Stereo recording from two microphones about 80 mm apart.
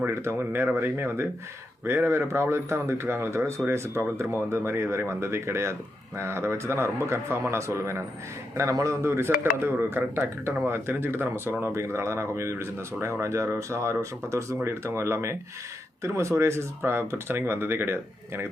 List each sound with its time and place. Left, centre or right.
0.1 s speech: right